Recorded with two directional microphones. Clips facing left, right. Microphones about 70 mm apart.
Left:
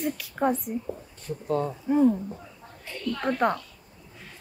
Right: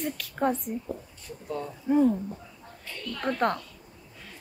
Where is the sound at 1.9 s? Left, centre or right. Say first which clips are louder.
Left 1 dB; centre.